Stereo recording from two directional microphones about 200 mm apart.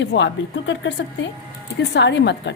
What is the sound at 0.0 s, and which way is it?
A woman's voice, 60° left (ahead or behind).